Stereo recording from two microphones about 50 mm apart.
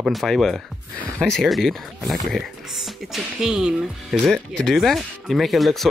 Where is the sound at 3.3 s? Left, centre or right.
Centre.